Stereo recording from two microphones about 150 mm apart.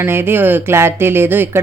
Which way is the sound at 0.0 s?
15° right (ahead or behind).